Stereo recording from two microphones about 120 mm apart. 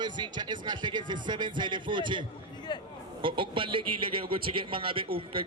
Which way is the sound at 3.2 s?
45° right (ahead or behind).